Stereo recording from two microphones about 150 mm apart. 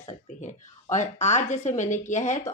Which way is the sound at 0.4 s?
55° left (ahead or behind).